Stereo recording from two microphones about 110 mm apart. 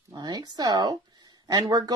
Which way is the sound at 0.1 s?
35° right (ahead or behind).